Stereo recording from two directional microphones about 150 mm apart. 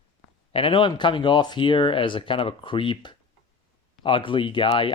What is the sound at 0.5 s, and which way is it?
Speech, 35° left (ahead or behind).